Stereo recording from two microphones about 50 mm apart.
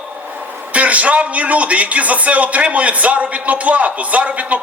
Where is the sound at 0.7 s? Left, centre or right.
Right.